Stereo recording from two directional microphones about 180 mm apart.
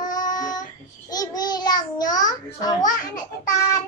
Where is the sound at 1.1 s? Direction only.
20° left (ahead or behind).